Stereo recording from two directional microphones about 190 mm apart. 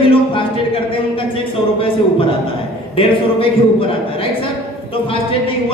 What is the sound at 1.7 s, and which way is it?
Speech, 30° left (ahead or behind).